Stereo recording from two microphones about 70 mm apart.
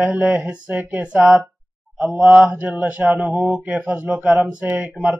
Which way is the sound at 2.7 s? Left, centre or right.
Centre.